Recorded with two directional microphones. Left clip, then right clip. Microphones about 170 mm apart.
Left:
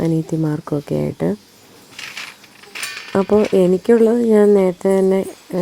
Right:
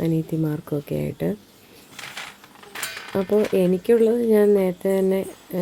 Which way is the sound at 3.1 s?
20° left (ahead or behind).